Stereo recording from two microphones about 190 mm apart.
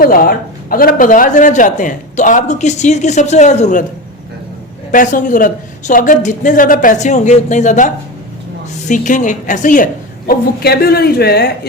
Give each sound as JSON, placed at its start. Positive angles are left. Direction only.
{"t": 0.0, "sound": "a man's voice", "side_deg": 50}
{"t": 4.9, "sound": "a woman's voice", "side_deg": 45}